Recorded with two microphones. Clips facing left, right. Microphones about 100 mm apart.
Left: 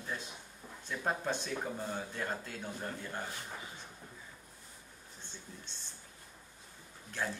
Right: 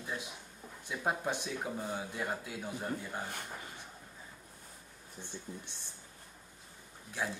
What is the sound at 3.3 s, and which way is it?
Speech, 55° right (ahead or behind).